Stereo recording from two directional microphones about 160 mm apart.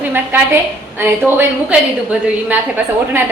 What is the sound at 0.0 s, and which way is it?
A woman's voice, 10° right (ahead or behind).